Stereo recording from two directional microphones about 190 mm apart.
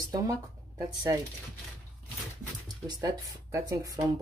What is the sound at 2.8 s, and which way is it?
Speech, 20° right (ahead or behind).